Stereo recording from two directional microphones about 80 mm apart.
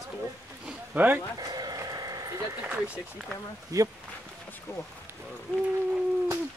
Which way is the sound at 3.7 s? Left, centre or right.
Right.